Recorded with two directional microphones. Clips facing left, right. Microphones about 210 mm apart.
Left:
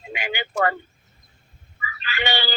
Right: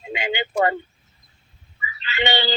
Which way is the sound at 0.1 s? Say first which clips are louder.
Right 4 dB; 25° right (ahead or behind).